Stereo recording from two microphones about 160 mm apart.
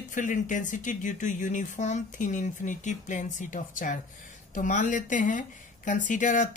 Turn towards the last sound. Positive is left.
turn(degrees=55)  # may be behind; listen again after turning